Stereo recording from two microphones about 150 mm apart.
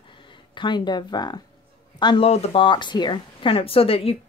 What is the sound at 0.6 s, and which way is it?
A woman's voice, 30° left (ahead or behind).